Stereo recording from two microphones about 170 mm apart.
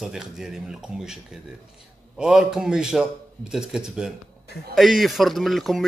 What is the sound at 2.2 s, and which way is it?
A man's voice, 5° right (ahead or behind).